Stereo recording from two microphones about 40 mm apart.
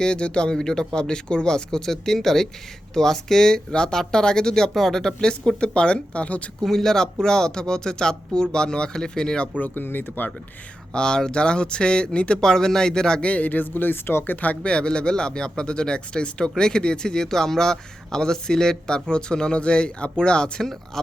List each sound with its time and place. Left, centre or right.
0.0 s speech: left
4.7 s speech: centre
5.5 s speech: left
6.6 s speech: centre
9.6 s speech: left
9.8 s speech: left
10.9 s speech: centre
12.4 s speech: centre
13.4 s speech: left
14.4 s speech: left
14.7 s speech: left
20.9 s speech: centre